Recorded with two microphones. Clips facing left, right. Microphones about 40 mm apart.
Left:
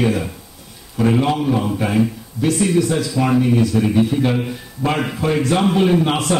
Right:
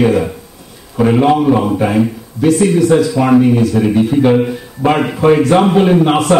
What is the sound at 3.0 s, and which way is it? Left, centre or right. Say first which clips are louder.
A man's voice: right 7 dB; centre.